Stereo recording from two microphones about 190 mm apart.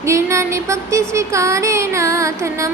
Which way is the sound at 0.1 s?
15° right (ahead or behind).